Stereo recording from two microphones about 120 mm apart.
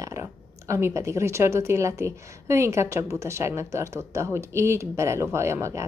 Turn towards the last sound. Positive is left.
turn(degrees=-25)  # may be behind; listen again after turning